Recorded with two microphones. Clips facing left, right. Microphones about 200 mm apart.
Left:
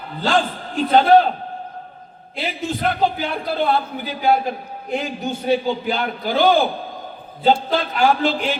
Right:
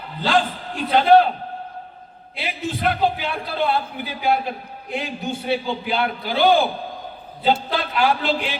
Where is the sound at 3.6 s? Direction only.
45° left (ahead or behind).